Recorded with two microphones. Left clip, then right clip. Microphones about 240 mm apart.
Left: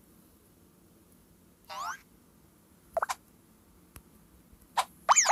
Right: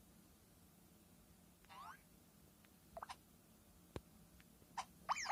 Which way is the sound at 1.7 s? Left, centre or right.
Left.